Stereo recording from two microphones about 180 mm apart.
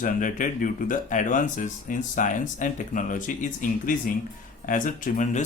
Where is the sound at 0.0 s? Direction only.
50° left (ahead or behind).